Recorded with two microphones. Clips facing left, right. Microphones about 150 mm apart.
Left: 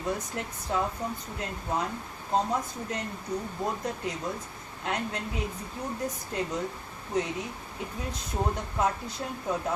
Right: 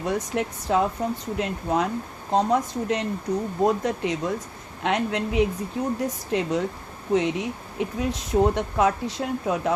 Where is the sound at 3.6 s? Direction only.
90° right.